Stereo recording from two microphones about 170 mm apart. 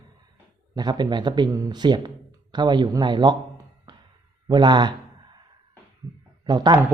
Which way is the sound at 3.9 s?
25° right (ahead or behind).